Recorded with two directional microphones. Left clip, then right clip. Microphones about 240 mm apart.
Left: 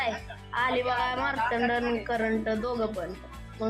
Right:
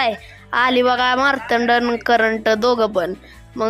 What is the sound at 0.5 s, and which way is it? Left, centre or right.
Speech, right.